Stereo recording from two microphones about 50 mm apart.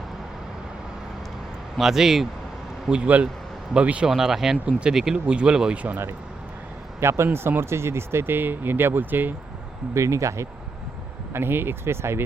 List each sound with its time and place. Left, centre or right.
1.8 s speech: centre
2.9 s speech: right
4.1 s speech: centre
4.6 s speech: right
7.0 s speech: right
7.3 s speech: right
9.9 s speech: right
11.3 s speech: right